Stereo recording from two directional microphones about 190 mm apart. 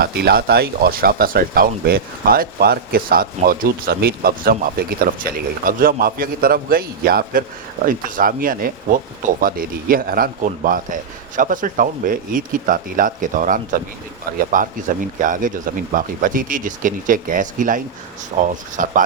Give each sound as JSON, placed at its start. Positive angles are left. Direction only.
{"t": 0.0, "sound": "speech", "side_deg": -55}